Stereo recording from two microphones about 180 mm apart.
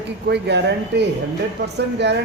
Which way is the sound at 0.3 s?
70° right (ahead or behind).